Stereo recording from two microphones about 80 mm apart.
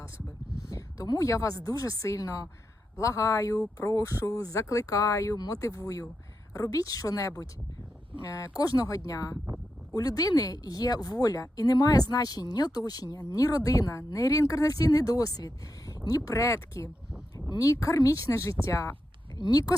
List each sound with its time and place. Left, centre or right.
0.7 s a sound: left
1.0 s a woman's voice: left
19.4 s a woman's voice: left